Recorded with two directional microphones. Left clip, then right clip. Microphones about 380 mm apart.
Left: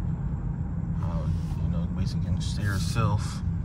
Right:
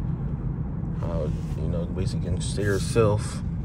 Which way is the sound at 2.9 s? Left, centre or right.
Centre.